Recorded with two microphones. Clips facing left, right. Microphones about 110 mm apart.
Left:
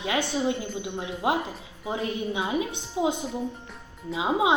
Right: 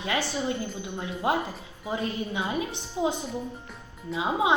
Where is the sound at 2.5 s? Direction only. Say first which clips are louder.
Left 2 dB; 15° left (ahead or behind).